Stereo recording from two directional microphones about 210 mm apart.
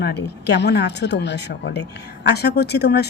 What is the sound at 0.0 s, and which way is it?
Speech, 55° left (ahead or behind).